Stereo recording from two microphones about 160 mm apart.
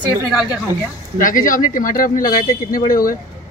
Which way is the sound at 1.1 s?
60° left (ahead or behind).